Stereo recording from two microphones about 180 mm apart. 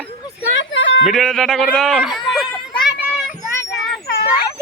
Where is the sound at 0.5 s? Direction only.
90° left.